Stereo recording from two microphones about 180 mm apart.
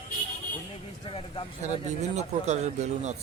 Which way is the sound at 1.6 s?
40° right (ahead or behind).